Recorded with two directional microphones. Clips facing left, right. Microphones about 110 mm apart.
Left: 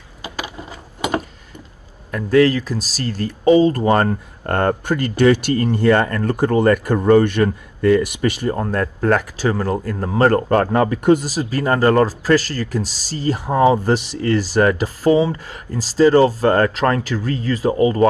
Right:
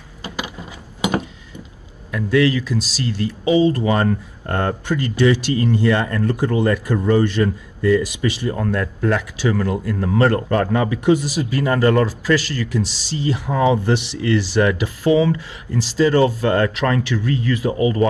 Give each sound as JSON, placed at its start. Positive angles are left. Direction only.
{"t": 2.0, "sound": "speech", "side_deg": 45}
{"t": 8.5, "sound": "speech", "side_deg": 35}